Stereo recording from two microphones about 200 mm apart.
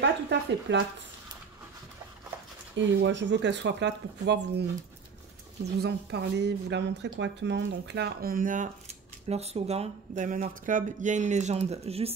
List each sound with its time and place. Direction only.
0.0 s a sound: 60° right (ahead or behind)
2.9 s speech: 65° right (ahead or behind)
5.8 s speech: 55° right (ahead or behind); by 12.1 s 30° right (ahead or behind)